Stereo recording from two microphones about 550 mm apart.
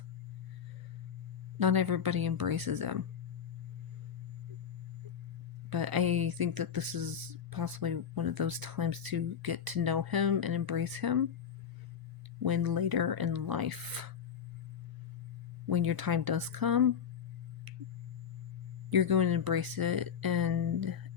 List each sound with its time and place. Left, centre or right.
1.5 s speech: right
5.7 s speech: right
12.4 s speech: right
15.6 s speech: right
17.7 s sine wave: right
18.9 s speech: right